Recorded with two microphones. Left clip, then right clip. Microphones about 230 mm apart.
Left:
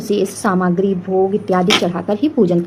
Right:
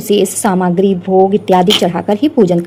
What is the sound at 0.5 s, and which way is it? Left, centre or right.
A woman's voice, right.